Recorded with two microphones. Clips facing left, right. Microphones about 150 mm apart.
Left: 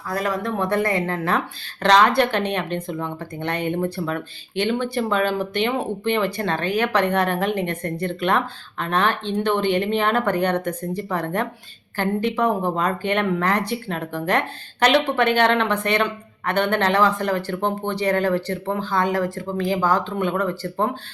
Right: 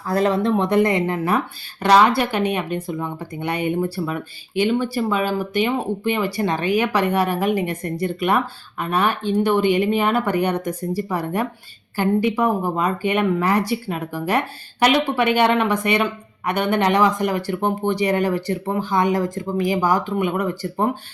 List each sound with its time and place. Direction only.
0.1 s speech: 30° right (ahead or behind); by 20.9 s 10° right (ahead or behind)